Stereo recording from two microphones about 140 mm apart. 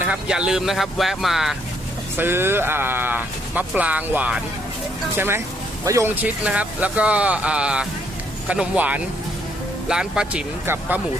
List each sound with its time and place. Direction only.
0.0 s speech: 5° right (ahead or behind)
2.1 s speech: 15° right (ahead or behind)